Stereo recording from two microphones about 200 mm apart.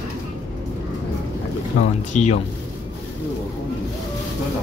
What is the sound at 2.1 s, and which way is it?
Speech, 35° left (ahead or behind).